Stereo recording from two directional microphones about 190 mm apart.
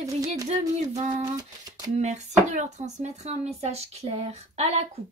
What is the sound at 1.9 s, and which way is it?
A woman's voice, 35° right (ahead or behind).